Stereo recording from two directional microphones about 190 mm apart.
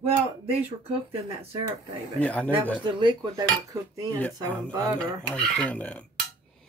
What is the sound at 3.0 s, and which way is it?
Cutlery, 25° right (ahead or behind).